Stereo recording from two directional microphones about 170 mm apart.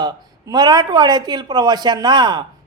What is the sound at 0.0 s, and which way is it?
A man's voice, 25° right (ahead or behind).